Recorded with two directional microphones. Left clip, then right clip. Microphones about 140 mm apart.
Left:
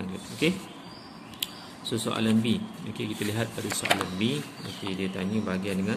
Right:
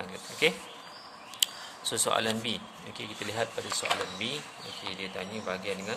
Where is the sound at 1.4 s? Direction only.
50° right (ahead or behind); by 3.4 s 30° right (ahead or behind).